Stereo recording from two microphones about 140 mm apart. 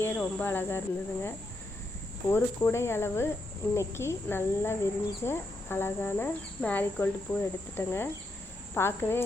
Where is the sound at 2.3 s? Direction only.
20° left (ahead or behind).